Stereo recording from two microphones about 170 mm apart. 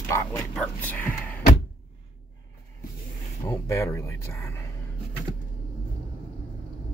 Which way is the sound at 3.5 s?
15° left (ahead or behind).